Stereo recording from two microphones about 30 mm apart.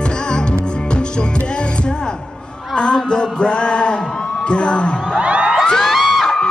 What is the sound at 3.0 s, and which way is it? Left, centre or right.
Music, left.